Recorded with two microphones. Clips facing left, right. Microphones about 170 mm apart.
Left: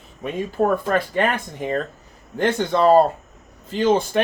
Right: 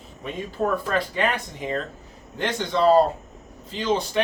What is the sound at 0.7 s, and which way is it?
Speech, 50° left (ahead or behind).